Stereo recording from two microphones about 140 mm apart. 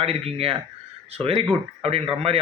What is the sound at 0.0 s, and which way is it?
A man's voice, 45° right (ahead or behind).